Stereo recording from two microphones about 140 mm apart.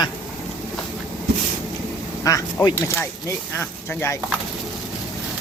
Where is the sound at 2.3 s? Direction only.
25° left (ahead or behind).